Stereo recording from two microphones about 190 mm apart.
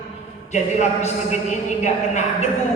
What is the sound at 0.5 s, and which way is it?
A woman's voice, 35° left (ahead or behind).